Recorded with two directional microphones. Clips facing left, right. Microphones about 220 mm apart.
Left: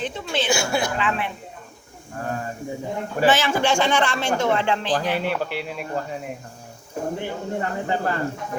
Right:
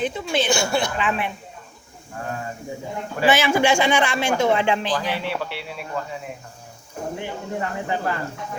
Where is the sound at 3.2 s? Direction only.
10° right (ahead or behind).